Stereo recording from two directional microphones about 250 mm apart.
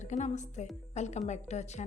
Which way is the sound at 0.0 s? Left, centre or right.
Left.